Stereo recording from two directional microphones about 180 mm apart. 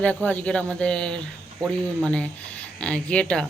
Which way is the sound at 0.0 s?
10° left (ahead or behind).